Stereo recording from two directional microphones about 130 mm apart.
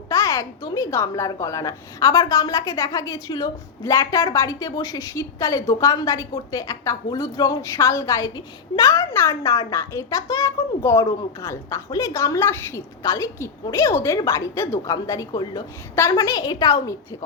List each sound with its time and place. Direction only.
0.1 s a woman's voice: 20° left (ahead or behind)